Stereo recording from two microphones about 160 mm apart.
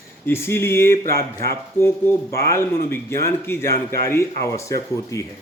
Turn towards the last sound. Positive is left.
turn(degrees=20)  # may be behind; listen again after turning